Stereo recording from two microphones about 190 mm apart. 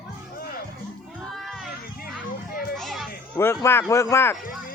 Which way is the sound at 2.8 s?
Centre (ahead or behind).